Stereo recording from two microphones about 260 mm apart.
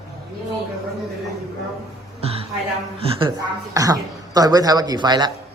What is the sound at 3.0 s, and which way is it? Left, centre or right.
A man's voice, centre.